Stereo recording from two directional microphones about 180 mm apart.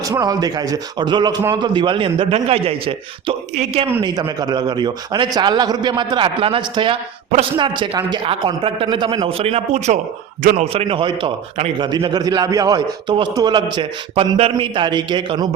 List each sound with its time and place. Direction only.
0.0 s a man's voice: 20° right (ahead or behind); by 3.8 s 35° right (ahead or behind)
4.0 s a man's voice: 20° right (ahead or behind)